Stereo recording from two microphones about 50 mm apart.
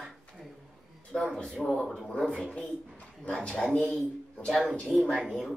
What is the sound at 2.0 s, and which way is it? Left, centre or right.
Speech, centre.